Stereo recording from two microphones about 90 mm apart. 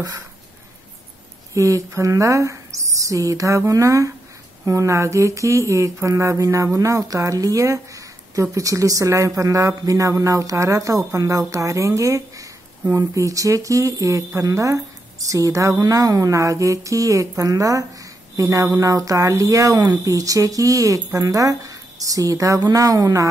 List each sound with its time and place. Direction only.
1.5 s mantra: 35° right (ahead or behind)
18.3 s speech: 35° right (ahead or behind)
18.8 s mantra: 40° right (ahead or behind)